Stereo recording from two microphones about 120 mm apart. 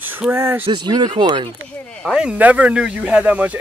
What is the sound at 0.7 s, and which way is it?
Speech, 35° right (ahead or behind).